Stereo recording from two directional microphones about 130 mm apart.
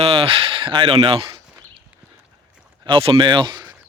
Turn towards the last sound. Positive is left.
turn(degrees=-35)  # may be behind; listen again after turning